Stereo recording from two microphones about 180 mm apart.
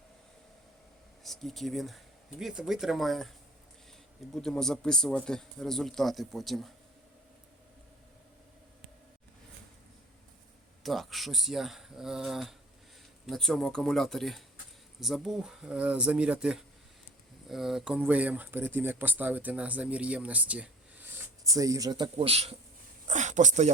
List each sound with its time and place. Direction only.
1.2 s a man's voice: centre (ahead or behind)
10.8 s a man's voice: centre (ahead or behind)
21.5 s speech: 20° right (ahead or behind)
23.0 s a sound: 40° right (ahead or behind)